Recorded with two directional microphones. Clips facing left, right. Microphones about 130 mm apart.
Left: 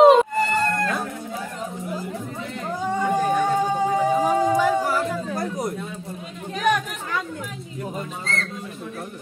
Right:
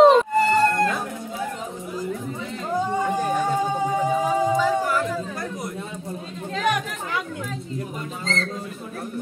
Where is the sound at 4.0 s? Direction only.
10° left (ahead or behind).